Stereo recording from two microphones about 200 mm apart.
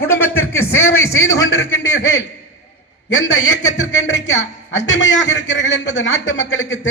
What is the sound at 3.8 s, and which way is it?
A man's voice, 70° left (ahead or behind).